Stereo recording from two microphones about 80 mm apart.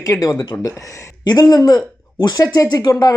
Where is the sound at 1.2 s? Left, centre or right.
Left.